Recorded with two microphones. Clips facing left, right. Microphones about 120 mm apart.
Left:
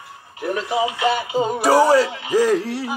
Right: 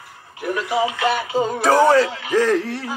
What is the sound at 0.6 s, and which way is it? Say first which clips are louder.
Music: right 1 dB; 20° left (ahead or behind).